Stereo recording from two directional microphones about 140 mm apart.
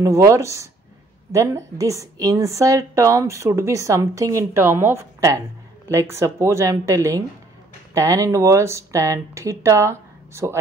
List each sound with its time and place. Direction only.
0.0 s a woman's voice: 20° right (ahead or behind)